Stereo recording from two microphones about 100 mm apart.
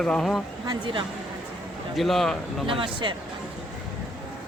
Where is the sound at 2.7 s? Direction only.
60° right (ahead or behind).